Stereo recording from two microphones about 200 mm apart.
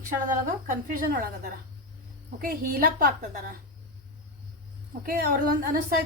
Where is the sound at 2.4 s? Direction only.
45° right (ahead or behind).